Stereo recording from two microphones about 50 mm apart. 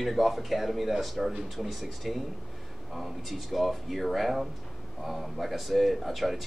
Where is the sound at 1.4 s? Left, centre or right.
Centre.